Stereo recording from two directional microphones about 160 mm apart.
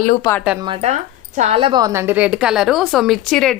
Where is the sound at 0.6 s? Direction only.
35° right (ahead or behind).